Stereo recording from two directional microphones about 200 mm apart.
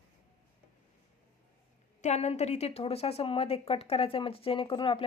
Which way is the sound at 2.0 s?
35° left (ahead or behind).